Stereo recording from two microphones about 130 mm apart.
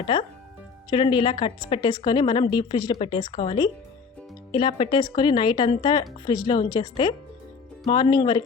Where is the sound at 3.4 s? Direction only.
50° left (ahead or behind).